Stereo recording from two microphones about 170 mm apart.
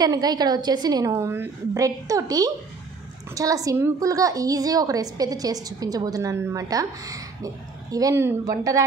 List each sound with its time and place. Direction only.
0.0 s a woman's voice: 20° right (ahead or behind)